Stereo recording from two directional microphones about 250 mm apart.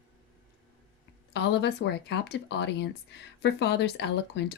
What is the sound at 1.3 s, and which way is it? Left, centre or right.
Speech, left.